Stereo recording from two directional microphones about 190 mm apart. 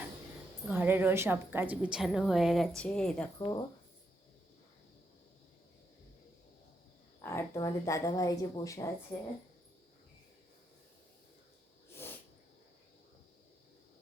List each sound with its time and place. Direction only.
0.7 s a woman's voice: 10° right (ahead or behind)
3.3 s speech: 20° left (ahead or behind)
7.2 s speech: 15° left (ahead or behind)